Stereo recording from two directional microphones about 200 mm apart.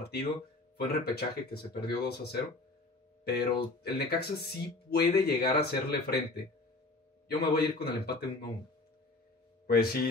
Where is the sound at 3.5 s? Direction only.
50° left (ahead or behind).